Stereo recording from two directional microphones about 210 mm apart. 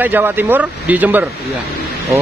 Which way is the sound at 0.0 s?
10° right (ahead or behind).